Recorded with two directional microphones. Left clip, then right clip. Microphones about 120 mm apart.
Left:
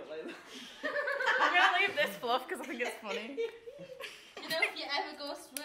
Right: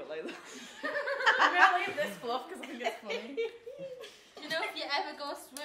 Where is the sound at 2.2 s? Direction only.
25° left (ahead or behind).